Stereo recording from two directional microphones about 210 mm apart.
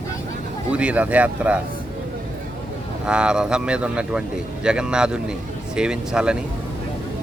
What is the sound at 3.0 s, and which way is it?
Speech, 5° right (ahead or behind).